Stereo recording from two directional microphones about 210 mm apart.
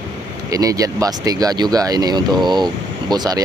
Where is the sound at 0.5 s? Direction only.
15° right (ahead or behind).